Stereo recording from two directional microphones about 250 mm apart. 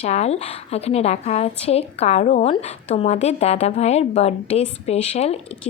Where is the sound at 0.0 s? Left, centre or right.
Left.